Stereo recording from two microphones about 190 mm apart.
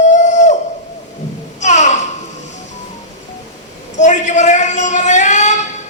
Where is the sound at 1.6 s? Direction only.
40° left (ahead or behind).